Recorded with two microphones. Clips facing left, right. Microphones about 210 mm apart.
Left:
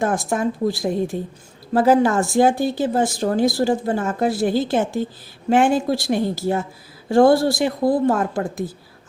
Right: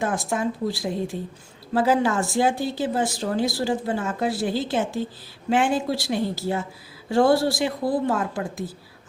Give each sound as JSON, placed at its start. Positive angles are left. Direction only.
{"t": 0.0, "sound": "speech", "side_deg": 45}